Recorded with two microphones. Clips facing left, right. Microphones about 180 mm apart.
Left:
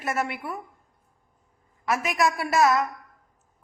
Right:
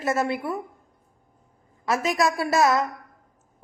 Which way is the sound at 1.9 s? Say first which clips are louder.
Right 2 dB; 30° right (ahead or behind).